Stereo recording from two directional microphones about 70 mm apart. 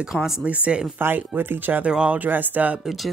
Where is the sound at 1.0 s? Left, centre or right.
Right.